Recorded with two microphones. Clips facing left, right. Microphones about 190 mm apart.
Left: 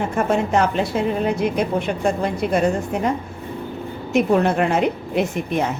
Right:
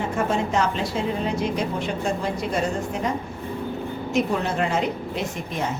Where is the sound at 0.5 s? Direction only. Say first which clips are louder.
Left 5 dB; 55° left (ahead or behind).